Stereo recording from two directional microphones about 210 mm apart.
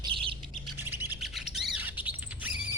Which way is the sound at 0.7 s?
10° right (ahead or behind).